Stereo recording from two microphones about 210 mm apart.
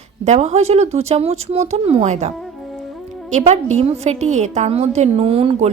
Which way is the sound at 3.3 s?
30° right (ahead or behind).